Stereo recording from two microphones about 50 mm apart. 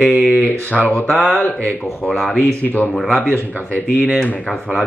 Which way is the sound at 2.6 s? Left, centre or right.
Left.